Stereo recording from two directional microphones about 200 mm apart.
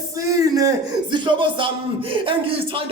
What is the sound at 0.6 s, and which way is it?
A man's voice, 20° right (ahead or behind).